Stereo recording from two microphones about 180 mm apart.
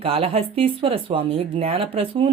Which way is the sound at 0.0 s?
30° right (ahead or behind).